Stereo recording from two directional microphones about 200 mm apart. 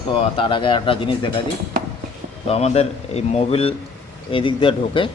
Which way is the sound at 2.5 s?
30° left (ahead or behind).